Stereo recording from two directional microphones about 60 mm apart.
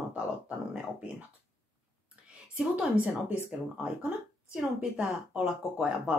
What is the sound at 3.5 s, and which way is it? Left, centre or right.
Speech, right.